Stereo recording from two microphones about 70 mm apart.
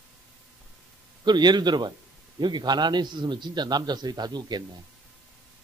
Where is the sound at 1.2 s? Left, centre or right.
Right.